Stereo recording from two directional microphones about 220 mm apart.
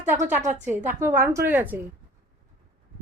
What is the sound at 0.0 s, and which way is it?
Speech, 35° right (ahead or behind).